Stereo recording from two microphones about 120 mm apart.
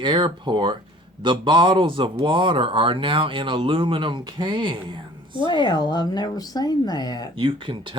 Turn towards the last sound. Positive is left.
turn(degrees=-45)  # may be behind; listen again after turning